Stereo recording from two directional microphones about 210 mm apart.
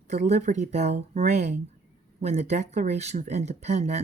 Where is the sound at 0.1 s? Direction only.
35° right (ahead or behind).